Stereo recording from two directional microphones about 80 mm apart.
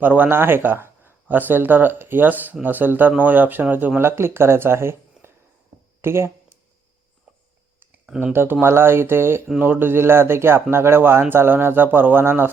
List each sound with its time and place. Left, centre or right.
0.0 s speech: right
8.3 s speech: right